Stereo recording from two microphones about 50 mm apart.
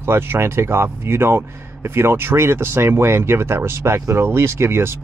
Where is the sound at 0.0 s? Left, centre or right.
Right.